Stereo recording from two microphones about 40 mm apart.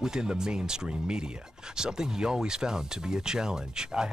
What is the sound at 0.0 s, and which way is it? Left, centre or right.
Speech, centre.